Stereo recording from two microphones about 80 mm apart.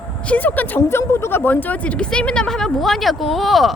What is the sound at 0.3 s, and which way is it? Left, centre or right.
Speech, left.